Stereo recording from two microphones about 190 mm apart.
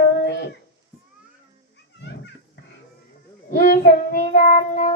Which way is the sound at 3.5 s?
50° left (ahead or behind).